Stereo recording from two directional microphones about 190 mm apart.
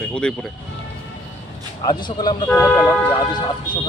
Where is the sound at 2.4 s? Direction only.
10° left (ahead or behind).